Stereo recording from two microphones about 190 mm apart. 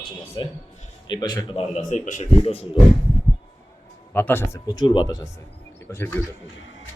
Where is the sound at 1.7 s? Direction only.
40° left (ahead or behind).